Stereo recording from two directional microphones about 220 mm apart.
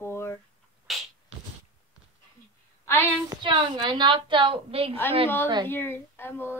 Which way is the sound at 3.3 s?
20° right (ahead or behind).